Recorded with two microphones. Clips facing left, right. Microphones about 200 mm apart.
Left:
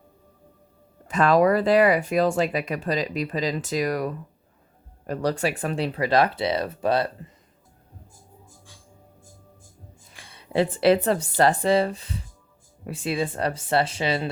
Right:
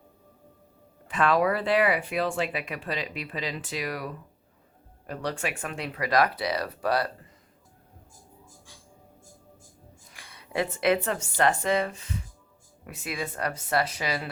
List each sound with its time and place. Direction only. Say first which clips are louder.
1.0 s speech: left 5 dB; 40° left (ahead or behind); by 7.3 s 25° left (ahead or behind)
10.1 s a sound: left 6 dB; 30° left (ahead or behind)
11.3 s speech: left 4 dB; 35° left (ahead or behind)